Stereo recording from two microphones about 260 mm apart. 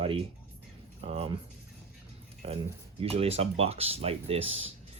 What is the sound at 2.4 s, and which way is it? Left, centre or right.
Speech, right.